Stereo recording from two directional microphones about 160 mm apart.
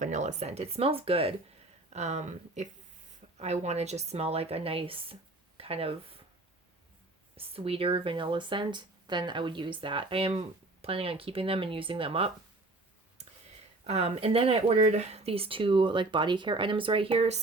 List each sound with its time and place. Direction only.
0.0 s speech: 50° right (ahead or behind)
7.3 s speech: 35° right (ahead or behind)
13.2 s a sound: 45° right (ahead or behind)
13.8 s speech: 40° right (ahead or behind)